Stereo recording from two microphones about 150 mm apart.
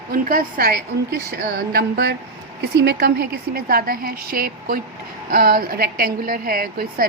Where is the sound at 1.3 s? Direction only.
90° right.